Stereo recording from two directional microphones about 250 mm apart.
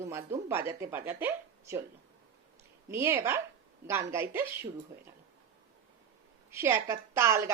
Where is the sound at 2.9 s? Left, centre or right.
Centre.